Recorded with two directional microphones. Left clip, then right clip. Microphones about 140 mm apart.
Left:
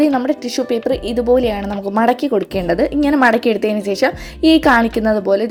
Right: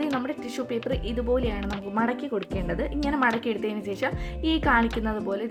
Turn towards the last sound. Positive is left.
turn(degrees=30)  # may be behind; listen again after turning